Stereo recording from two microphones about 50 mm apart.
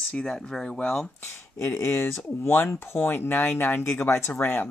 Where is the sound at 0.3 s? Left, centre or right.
Centre.